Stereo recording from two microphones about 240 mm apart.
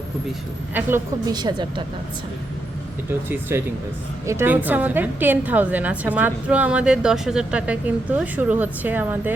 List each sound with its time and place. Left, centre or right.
0.7 s a woman's voice: centre
3.1 s a woman's voice: centre